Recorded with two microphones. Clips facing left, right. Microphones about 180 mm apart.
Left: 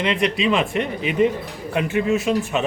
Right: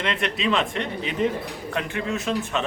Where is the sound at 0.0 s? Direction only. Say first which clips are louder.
Left 5 dB; 5° left (ahead or behind).